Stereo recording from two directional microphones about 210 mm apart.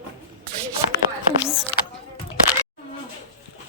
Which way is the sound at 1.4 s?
5° right (ahead or behind).